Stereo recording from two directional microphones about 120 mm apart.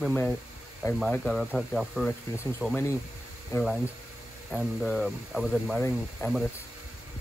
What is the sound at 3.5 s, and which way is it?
Speech, 25° left (ahead or behind).